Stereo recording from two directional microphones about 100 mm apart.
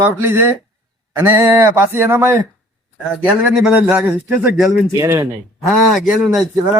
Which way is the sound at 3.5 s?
5° right (ahead or behind).